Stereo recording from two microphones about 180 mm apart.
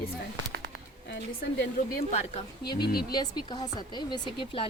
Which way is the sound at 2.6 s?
60° left (ahead or behind).